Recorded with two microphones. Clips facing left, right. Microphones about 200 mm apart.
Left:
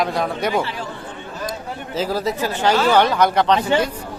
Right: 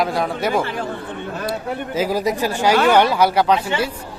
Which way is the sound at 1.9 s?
10° right (ahead or behind).